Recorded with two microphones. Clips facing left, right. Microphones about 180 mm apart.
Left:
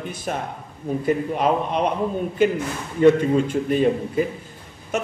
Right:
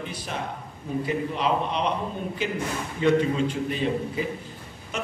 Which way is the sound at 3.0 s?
50° left (ahead or behind).